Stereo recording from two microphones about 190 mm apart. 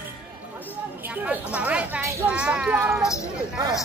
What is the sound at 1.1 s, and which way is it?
Speech, 10° right (ahead or behind).